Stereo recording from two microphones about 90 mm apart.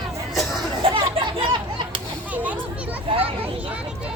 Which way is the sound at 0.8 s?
70° right (ahead or behind).